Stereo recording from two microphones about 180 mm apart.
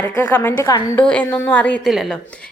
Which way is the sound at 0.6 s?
20° left (ahead or behind).